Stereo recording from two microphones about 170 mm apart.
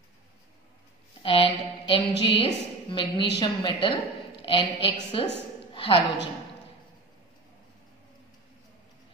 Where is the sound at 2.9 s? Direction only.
30° left (ahead or behind).